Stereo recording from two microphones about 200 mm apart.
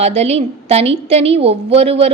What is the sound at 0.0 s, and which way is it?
A woman's voice, 30° right (ahead or behind).